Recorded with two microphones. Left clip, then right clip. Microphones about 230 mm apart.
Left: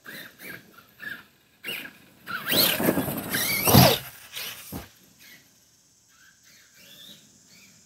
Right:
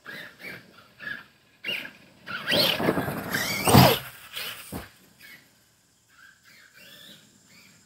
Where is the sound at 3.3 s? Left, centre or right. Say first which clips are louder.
Right 1 dB; left; by 5.2 s centre.